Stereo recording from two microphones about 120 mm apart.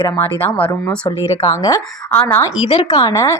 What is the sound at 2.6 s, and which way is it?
Speech, 45° left (ahead or behind).